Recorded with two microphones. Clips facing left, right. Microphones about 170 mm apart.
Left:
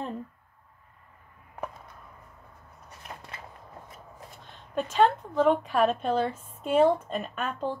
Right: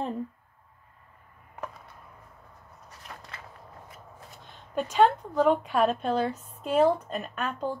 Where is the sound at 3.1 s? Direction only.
30° left (ahead or behind).